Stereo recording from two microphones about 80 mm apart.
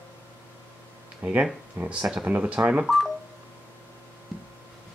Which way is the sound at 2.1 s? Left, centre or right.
Centre.